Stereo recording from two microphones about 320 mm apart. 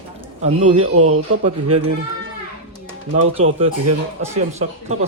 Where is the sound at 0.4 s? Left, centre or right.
Right.